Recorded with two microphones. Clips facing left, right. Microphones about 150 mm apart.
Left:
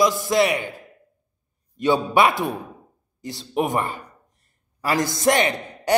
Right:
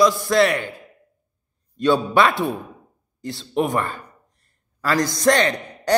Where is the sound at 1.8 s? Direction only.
15° left (ahead or behind).